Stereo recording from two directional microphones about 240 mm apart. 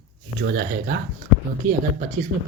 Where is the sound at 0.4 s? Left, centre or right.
Right.